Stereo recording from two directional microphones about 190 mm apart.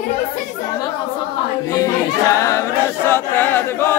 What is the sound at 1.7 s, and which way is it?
Choir, 20° left (ahead or behind).